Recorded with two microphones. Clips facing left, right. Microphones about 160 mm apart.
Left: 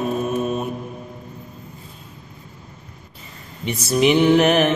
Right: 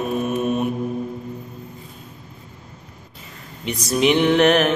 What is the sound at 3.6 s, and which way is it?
Mantra, 5° left (ahead or behind).